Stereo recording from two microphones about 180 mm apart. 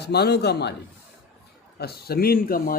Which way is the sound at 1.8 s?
60° left (ahead or behind).